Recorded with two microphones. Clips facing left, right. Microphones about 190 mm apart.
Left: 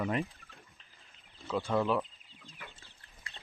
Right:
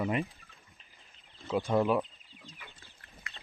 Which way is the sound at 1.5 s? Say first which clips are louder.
Right 3 dB; 15° right (ahead or behind).